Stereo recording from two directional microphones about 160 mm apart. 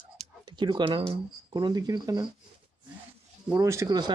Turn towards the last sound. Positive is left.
turn(degrees=-20)  # may be behind; listen again after turning